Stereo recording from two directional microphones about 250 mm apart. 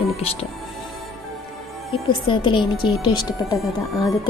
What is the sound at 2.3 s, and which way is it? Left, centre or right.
Speech, centre.